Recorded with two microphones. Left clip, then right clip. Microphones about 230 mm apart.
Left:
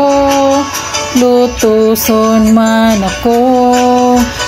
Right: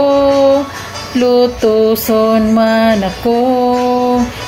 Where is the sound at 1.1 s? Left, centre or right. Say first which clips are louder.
Left 1 dB; left.